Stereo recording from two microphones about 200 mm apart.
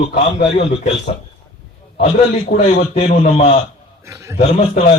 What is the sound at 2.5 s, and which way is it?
Speech, 40° left (ahead or behind).